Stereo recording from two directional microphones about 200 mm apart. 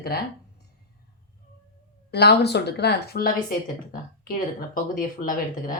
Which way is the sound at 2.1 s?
55° left (ahead or behind).